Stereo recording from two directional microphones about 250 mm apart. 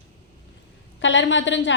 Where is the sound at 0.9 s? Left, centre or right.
Left.